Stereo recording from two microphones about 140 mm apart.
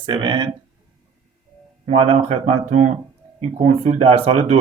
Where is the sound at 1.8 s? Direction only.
45° right (ahead or behind).